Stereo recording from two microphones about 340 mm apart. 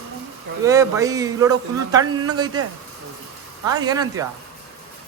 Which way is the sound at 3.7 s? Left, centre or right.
Centre.